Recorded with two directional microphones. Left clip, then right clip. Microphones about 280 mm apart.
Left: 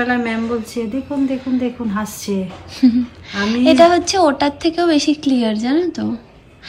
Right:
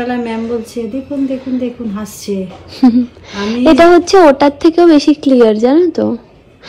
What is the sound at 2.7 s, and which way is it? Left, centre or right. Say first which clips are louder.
A woman's voice: right 5 dB; centre.